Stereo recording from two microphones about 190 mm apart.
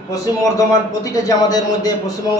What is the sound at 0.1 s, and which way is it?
Speech, 15° left (ahead or behind).